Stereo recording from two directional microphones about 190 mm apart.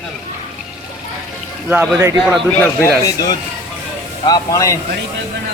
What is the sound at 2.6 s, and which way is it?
Speech, 10° left (ahead or behind).